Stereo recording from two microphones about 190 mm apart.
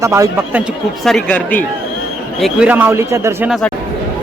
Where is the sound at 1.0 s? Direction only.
5° left (ahead or behind); by 3.5 s 15° right (ahead or behind).